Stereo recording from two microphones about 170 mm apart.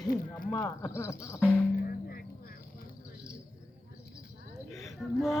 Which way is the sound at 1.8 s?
60° left (ahead or behind).